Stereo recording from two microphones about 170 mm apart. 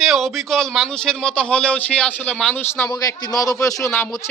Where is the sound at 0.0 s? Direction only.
Centre (ahead or behind).